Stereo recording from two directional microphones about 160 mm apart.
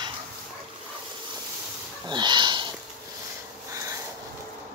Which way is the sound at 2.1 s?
30° right (ahead or behind).